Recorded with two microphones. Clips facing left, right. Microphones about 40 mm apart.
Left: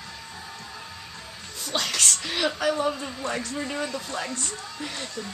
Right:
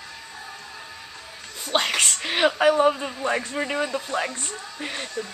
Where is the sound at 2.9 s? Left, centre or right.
Right.